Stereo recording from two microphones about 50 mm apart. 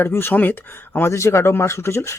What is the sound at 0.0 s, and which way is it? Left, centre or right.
Speech, left.